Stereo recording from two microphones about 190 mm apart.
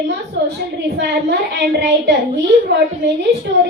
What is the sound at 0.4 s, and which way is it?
A woman's voice, 65° right (ahead or behind).